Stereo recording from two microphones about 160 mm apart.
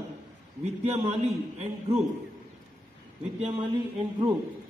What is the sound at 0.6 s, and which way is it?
A man's voice, 40° right (ahead or behind).